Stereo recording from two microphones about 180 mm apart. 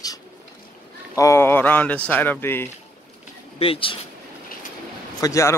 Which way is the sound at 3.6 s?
30° left (ahead or behind).